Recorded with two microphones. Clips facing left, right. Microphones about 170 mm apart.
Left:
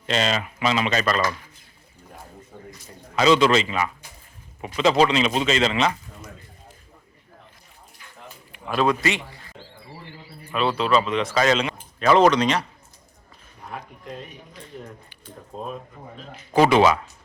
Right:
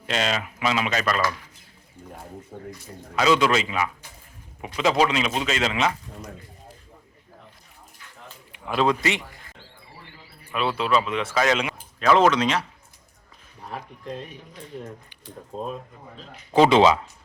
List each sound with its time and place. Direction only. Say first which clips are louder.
0.0 s speech: left 2 dB; 5° right (ahead or behind)
3.2 s speech: left 3 dB; 5° right (ahead or behind)
8.5 s speech: left 1 dB; 20° right (ahead or behind)
10.5 s speech: left 2 dB; 10° right (ahead or behind)
11.9 s speech: left 2 dB; centre (ahead or behind)
16.1 s speech: left 2 dB; 5° left (ahead or behind)
16.6 s speech: even; 20° right (ahead or behind)